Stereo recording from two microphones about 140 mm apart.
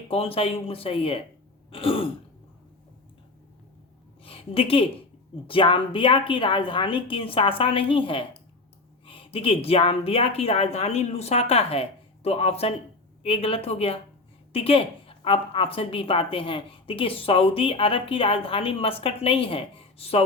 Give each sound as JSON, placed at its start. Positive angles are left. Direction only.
{"t": 0.1, "sound": "a woman's voice", "side_deg": 45}
{"t": 4.2, "sound": "a woman's voice", "side_deg": 40}